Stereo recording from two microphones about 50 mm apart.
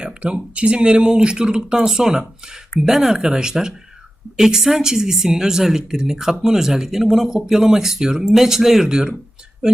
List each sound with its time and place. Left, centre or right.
0.0 s speech: right